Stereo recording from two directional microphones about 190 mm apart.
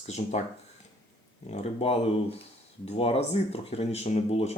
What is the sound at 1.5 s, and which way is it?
Speech, 35° left (ahead or behind).